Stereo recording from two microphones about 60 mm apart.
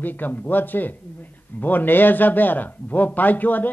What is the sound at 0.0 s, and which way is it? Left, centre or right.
A man's voice, left.